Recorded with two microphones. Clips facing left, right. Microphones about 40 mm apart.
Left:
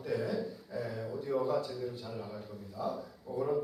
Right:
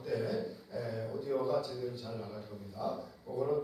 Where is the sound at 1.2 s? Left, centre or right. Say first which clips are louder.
Left 1 dB; centre.